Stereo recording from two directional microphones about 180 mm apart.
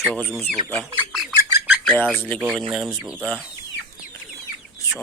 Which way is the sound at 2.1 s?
10° left (ahead or behind).